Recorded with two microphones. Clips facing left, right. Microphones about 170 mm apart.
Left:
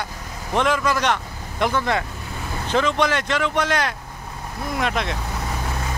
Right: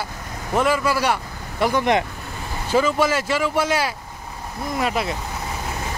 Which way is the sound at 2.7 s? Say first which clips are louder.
Right 2 dB; 5° right (ahead or behind).